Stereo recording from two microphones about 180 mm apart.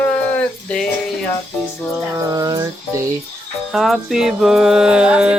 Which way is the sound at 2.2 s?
20° right (ahead or behind).